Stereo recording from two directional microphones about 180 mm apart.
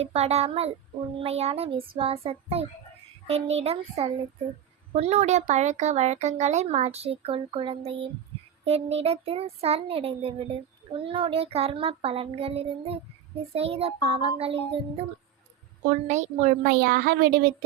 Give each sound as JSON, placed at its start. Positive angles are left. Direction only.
{"t": 0.0, "sound": "child singing", "side_deg": -35}
{"t": 16.0, "sound": "a child's voice", "side_deg": -40}